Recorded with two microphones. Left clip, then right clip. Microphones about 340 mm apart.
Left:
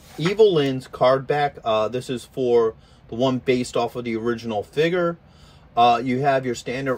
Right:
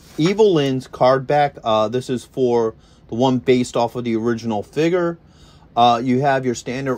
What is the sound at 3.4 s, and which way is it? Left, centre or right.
Speech, centre.